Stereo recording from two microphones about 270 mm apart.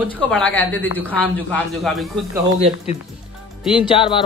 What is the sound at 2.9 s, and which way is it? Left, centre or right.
Speech, left.